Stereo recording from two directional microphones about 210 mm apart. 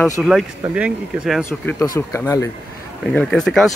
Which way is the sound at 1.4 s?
15° left (ahead or behind).